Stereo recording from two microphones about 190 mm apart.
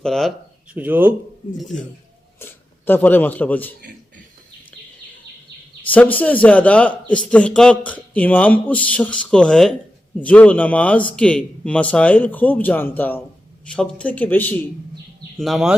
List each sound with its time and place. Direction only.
0.0 s speech: centre (ahead or behind)
5.9 s speech: 10° left (ahead or behind)
15.4 s speech: centre (ahead or behind)